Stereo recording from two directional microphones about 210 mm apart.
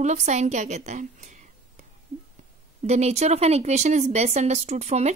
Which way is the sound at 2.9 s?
30° right (ahead or behind).